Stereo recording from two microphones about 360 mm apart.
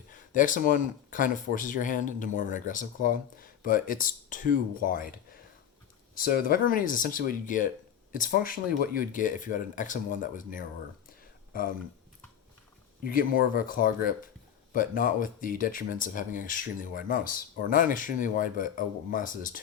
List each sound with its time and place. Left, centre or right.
0.1 s speech: left
13.1 s speech: left